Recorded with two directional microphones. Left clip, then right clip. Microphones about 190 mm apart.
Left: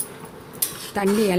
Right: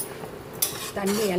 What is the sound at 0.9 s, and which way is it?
Stir, 55° left (ahead or behind).